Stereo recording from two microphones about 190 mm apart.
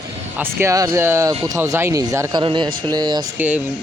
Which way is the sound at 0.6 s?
20° right (ahead or behind).